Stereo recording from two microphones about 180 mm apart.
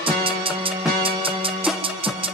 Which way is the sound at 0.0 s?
30° right (ahead or behind).